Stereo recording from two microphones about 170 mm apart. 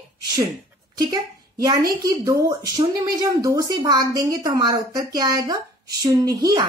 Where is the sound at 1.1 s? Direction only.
20° right (ahead or behind).